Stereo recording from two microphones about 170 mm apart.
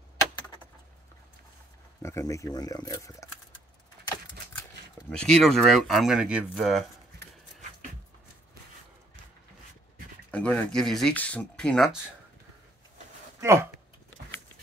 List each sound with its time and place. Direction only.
2.0 s speech: 15° left (ahead or behind)
5.1 s speech: 5° left (ahead or behind)
10.3 s speech: 5° left (ahead or behind)
13.4 s speech: 15° right (ahead or behind)